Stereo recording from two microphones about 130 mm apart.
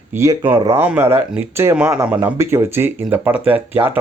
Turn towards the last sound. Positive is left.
turn(degrees=-15)  # may be behind; listen again after turning